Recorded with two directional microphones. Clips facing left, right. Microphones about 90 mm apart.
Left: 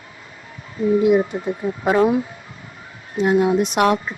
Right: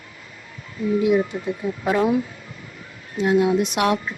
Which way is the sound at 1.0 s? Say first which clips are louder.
Left 1 dB; 40° left (ahead or behind).